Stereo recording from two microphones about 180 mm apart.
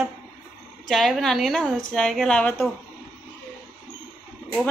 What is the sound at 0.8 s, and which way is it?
A woman's voice, centre (ahead or behind).